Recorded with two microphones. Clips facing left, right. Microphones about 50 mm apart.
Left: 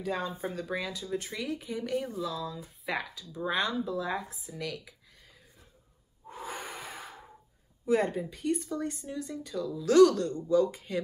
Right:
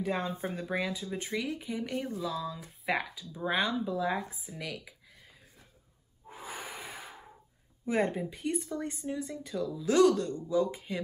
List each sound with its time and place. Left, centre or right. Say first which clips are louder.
0.0 s speech: even; centre
6.2 s breathing: left 3 dB; centre
7.8 s speech: left 2 dB; centre
9.8 s speech: left 4 dB; centre